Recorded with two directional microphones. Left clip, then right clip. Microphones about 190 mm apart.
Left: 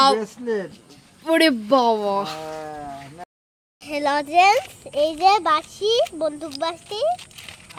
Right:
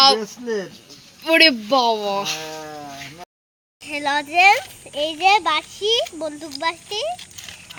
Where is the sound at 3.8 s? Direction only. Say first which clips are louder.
Even; 50° left (ahead or behind).